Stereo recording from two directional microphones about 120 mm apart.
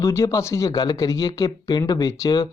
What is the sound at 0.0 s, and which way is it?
Speech, 25° left (ahead or behind).